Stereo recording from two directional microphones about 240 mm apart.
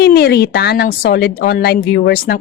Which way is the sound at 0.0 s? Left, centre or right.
Left.